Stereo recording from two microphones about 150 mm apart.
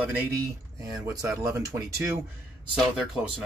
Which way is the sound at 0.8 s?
20° right (ahead or behind).